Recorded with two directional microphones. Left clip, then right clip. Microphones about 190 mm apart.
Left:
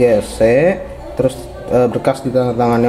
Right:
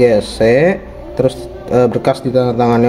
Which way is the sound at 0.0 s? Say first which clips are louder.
Right 1 dB; 20° right (ahead or behind).